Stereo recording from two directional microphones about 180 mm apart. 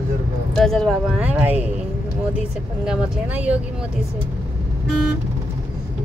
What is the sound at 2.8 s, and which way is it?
Speech, 10° right (ahead or behind).